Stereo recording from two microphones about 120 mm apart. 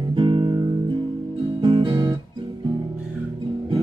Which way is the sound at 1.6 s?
40° right (ahead or behind).